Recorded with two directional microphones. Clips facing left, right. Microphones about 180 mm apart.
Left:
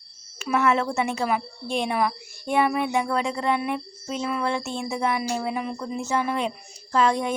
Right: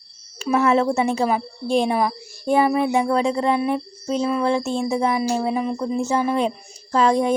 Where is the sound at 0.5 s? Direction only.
35° right (ahead or behind).